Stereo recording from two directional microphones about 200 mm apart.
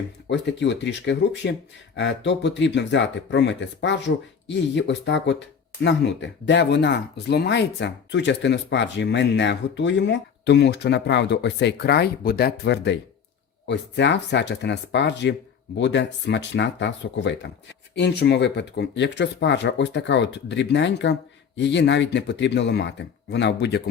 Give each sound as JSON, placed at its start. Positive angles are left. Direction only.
{"t": 0.3, "sound": "speech", "side_deg": 60}